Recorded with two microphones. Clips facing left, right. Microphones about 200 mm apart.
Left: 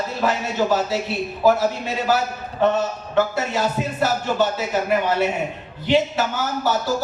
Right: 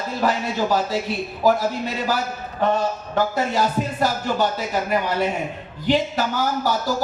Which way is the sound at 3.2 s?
40° right (ahead or behind).